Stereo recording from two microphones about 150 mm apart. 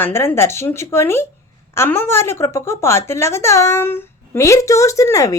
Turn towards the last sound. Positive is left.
turn(degrees=20)  # may be behind; listen again after turning